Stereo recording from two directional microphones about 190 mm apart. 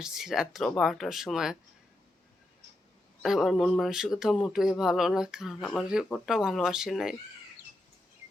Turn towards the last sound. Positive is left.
turn(degrees=0)  # may be behind; listen again after turning